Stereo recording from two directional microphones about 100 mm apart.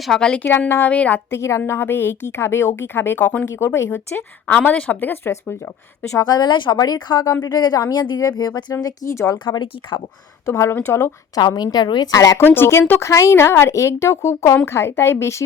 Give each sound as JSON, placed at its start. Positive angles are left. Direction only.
{"t": 0.0, "sound": "a woman's voice", "side_deg": 5}
{"t": 1.4, "sound": "a woman's voice", "side_deg": 30}
{"t": 6.1, "sound": "speech", "side_deg": 40}
{"t": 8.7, "sound": "speech", "side_deg": 30}
{"t": 9.4, "sound": "speech", "side_deg": 50}
{"t": 10.4, "sound": "a woman's voice", "side_deg": 30}
{"t": 11.3, "sound": "speech", "side_deg": 45}
{"t": 12.4, "sound": "a woman's voice", "side_deg": 20}